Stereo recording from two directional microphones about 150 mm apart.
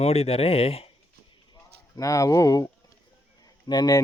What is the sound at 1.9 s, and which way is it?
Speech, 20° left (ahead or behind).